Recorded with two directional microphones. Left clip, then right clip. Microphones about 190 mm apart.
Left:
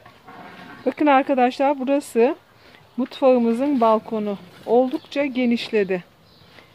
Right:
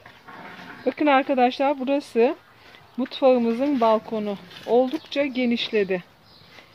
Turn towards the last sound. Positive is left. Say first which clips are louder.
# left 2 dB
turn(degrees=0)  # may be behind; listen again after turning